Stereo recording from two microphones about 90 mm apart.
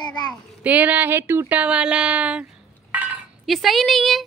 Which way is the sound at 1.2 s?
30° right (ahead or behind).